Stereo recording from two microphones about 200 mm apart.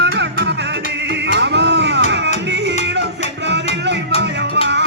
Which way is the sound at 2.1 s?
60° right (ahead or behind).